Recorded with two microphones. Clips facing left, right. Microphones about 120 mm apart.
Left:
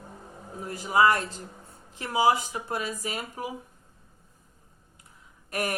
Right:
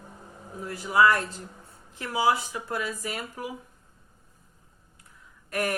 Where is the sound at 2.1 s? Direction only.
15° left (ahead or behind).